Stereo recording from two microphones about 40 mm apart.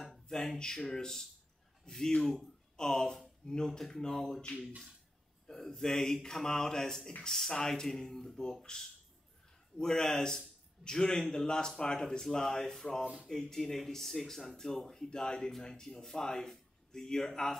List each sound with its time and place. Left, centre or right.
0.3 s a man's voice: centre
5.5 s a man's voice: centre
9.8 s a man's voice: centre